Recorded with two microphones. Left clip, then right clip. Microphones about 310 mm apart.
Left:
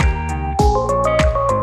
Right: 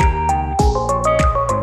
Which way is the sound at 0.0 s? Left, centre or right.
Centre.